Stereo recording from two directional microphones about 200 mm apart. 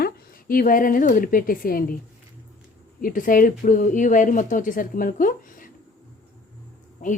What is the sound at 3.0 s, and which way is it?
A woman's voice, 45° left (ahead or behind).